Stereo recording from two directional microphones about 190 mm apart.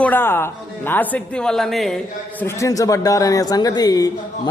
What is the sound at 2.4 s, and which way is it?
Speech, 15° left (ahead or behind).